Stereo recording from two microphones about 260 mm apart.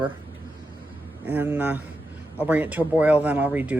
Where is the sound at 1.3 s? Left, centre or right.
Centre.